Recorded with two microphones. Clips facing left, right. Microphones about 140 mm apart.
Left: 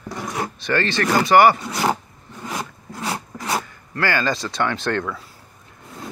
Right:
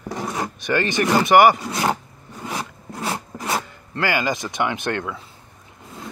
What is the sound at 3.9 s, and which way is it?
Speech, 15° right (ahead or behind).